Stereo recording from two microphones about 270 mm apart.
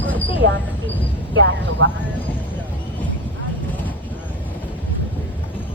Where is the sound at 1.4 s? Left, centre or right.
Right.